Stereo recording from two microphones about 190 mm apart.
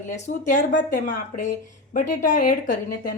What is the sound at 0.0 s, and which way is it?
Speech, 40° left (ahead or behind).